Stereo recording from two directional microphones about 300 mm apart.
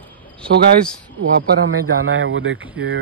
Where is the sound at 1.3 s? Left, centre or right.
Right.